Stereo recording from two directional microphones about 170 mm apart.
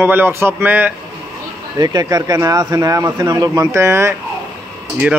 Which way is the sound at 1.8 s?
20° right (ahead or behind).